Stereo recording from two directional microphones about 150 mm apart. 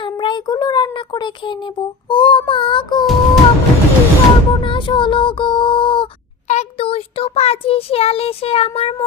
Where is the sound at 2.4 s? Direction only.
35° left (ahead or behind).